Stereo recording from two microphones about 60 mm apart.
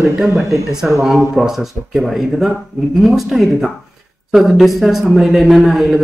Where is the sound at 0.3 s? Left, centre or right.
Right.